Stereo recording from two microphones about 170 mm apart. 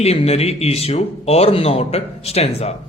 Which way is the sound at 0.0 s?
35° left (ahead or behind).